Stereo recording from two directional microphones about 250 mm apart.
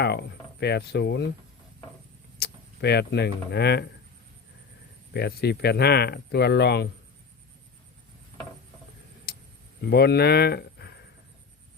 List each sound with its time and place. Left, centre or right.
0.0 s speech: left
2.4 s speech: left
5.1 s speech: left
9.3 s a sound: left
9.8 s speech: left